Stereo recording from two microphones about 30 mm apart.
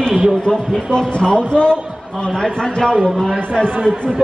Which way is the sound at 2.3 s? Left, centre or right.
Centre.